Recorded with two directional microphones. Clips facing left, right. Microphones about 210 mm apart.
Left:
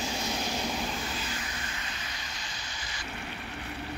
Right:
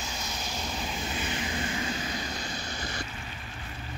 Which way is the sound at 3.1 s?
65° left (ahead or behind).